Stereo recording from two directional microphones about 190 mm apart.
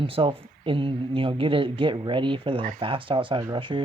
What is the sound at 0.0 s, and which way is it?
Speech, 30° right (ahead or behind).